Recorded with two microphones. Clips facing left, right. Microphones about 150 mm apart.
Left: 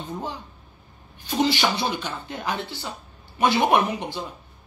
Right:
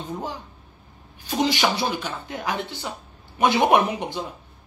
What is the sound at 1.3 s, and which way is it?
Speech, 10° right (ahead or behind).